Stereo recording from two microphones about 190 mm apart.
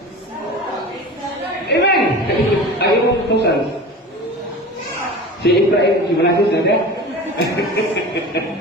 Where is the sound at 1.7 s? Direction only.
60° left (ahead or behind).